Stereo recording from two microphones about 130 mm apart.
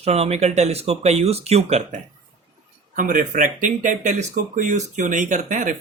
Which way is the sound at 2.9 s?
85° right.